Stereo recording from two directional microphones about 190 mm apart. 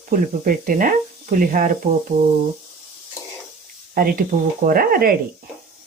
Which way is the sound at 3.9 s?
50° right (ahead or behind).